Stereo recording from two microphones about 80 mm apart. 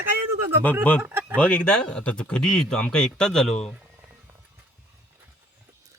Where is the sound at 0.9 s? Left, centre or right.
Left.